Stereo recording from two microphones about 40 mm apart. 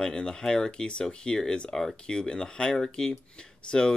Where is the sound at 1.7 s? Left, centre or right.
Centre.